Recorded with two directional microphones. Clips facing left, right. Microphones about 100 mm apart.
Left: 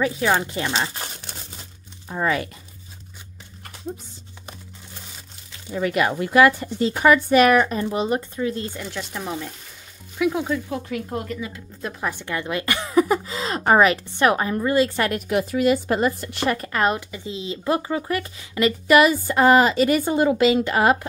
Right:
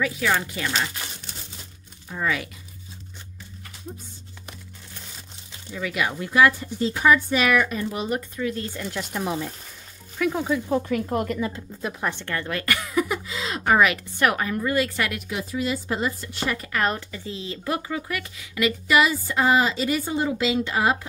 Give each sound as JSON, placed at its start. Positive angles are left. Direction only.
{"t": 0.0, "sound": "speech", "side_deg": 30}
{"t": 5.7, "sound": "a woman's voice", "side_deg": 45}
{"t": 7.5, "sound": "speech", "side_deg": 35}
{"t": 8.8, "sound": "speech", "side_deg": 0}
{"t": 10.7, "sound": "speech", "side_deg": -45}
{"t": 11.8, "sound": "speech", "side_deg": 0}
{"t": 12.2, "sound": "speech", "side_deg": 15}
{"t": 15.0, "sound": "a woman's voice", "side_deg": 40}
{"t": 16.7, "sound": "speech", "side_deg": 20}
{"t": 17.7, "sound": "speech", "side_deg": 30}
{"t": 18.9, "sound": "a woman's voice", "side_deg": 50}